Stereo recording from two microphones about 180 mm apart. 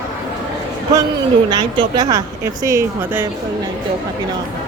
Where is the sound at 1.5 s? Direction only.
25° right (ahead or behind).